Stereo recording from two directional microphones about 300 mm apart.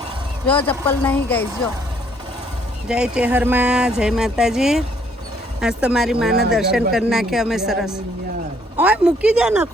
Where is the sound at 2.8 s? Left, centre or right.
Centre.